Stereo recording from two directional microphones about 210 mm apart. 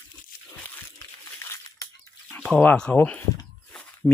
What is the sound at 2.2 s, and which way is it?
Speech, 5° left (ahead or behind).